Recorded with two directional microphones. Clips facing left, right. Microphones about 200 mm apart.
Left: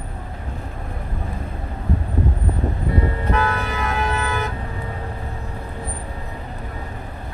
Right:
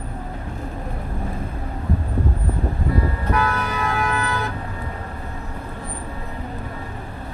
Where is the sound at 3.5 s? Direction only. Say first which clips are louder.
Even; 25° left (ahead or behind).